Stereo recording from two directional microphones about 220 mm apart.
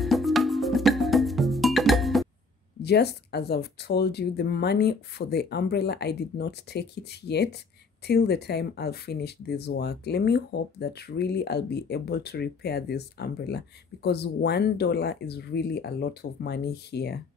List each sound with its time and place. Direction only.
0.0 s music: centre (ahead or behind)
2.8 s speech: 45° left (ahead or behind)